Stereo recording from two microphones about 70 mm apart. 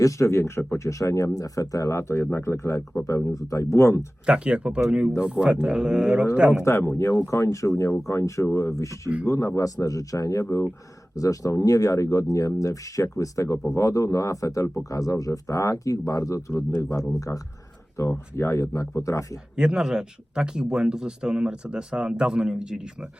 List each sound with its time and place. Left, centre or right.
0.0 s speech: left
3.2 s speech: left
4.3 s speech: centre
6.6 s speech: left
18.1 s speech: left
19.5 s speech: centre